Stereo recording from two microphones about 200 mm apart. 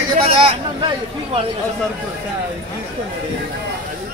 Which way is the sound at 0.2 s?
25° right (ahead or behind).